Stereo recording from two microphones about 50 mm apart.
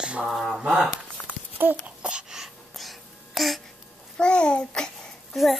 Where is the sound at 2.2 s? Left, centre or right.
Centre.